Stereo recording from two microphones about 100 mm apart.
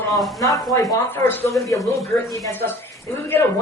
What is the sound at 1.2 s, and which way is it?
Speech, 20° left (ahead or behind).